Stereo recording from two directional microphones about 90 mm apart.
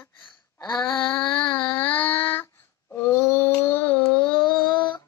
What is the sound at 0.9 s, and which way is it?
Child singing, 10° left (ahead or behind).